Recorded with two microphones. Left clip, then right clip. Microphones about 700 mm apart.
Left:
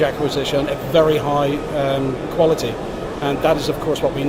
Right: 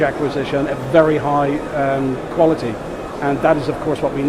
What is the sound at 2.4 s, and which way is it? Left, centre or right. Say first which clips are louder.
Speech: right 1 dB; right.